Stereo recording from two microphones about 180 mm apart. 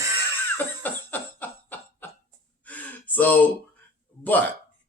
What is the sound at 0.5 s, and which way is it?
Cough, 10° left (ahead or behind).